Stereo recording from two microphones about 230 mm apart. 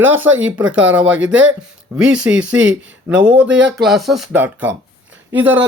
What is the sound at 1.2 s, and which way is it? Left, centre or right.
Speech, right.